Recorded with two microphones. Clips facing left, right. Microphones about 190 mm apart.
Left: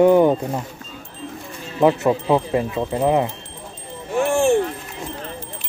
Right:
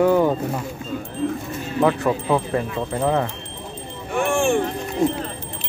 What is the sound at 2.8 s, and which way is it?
Speech, 10° left (ahead or behind).